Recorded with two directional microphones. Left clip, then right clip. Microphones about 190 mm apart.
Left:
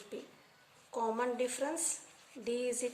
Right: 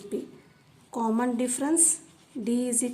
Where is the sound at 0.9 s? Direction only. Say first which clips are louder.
Right 6 dB; 30° right (ahead or behind).